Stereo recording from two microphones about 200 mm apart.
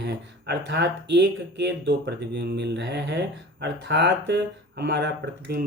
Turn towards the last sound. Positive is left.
turn(degrees=-60)  # may be behind; listen again after turning